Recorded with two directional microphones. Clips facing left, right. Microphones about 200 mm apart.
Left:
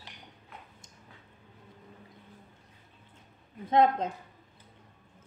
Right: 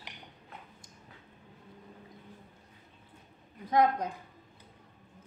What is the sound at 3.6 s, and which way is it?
Speech, 25° left (ahead or behind).